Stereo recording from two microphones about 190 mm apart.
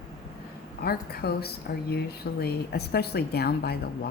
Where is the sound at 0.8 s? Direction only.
55° left (ahead or behind).